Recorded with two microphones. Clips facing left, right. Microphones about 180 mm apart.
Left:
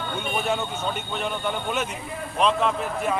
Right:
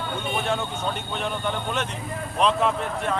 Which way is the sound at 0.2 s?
5° left (ahead or behind).